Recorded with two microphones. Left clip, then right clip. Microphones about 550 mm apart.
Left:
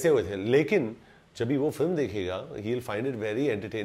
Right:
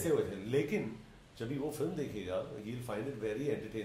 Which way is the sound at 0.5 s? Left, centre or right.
Left.